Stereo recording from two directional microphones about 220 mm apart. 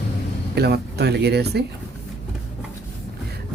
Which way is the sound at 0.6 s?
45° right (ahead or behind).